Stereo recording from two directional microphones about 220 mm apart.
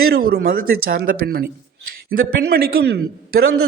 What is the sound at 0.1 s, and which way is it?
A man's voice, 45° right (ahead or behind).